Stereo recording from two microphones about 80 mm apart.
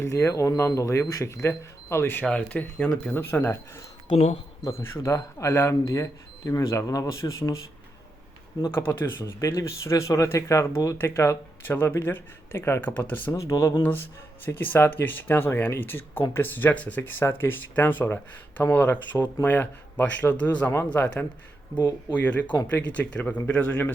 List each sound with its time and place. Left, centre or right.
0.0 s speech: left
2.5 s speech: centre; by 5.7 s left
5.8 s speech: left
8.7 s speech: left
13.3 s speech: left
14.4 s speech: left